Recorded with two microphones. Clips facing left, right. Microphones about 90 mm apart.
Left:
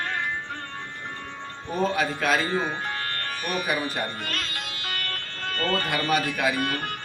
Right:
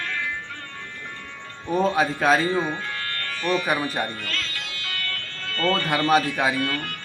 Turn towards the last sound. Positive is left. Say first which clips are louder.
# right 1 dB
turn(degrees=25)  # may be behind; listen again after turning